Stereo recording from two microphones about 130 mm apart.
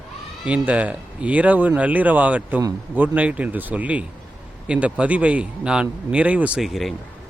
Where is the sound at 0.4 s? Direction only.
10° right (ahead or behind).